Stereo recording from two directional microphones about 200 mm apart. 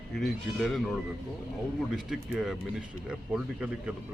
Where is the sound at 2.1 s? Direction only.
Centre (ahead or behind).